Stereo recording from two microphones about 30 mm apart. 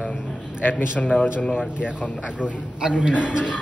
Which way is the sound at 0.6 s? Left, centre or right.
Left.